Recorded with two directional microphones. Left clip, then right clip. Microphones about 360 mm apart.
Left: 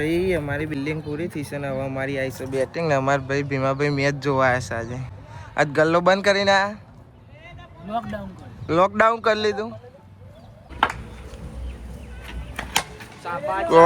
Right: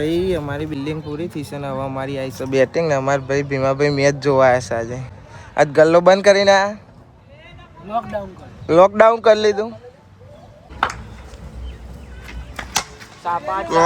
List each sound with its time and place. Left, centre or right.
0.0 s speech: centre
7.9 s speech: centre
13.2 s speech: right